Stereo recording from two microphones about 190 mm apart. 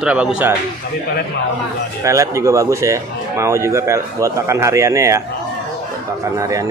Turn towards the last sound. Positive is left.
turn(degrees=-15)  # may be behind; listen again after turning